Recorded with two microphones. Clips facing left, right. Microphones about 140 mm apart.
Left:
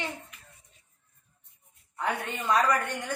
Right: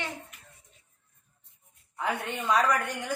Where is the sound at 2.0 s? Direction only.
Centre (ahead or behind).